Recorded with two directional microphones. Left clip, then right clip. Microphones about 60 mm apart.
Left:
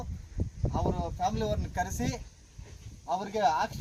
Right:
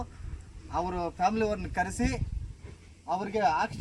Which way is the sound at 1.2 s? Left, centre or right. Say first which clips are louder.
Right 3 dB; left.